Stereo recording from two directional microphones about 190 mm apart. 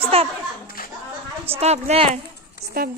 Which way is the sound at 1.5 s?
35° right (ahead or behind).